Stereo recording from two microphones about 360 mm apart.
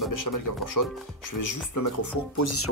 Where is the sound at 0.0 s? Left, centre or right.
Left.